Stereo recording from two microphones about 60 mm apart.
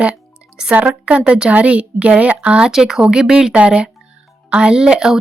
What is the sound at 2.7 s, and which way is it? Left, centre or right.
A woman's voice, centre.